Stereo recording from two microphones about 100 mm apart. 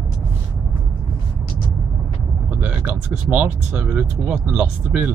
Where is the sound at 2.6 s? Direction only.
15° right (ahead or behind).